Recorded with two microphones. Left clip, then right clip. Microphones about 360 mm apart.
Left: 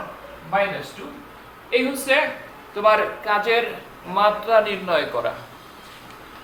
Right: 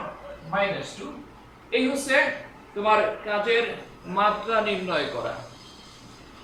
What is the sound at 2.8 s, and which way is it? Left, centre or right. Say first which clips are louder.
A man's voice: left 4 dB; centre.